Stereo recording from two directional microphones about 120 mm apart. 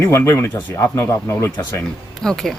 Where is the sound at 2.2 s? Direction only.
5° left (ahead or behind).